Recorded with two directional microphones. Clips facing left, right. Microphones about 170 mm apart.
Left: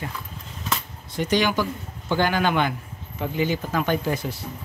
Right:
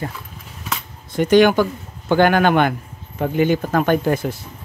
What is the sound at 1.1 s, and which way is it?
Speech, 55° right (ahead or behind).